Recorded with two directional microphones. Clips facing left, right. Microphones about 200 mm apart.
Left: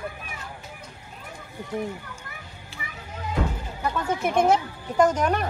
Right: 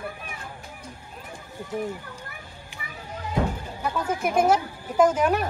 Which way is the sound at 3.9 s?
10° right (ahead or behind).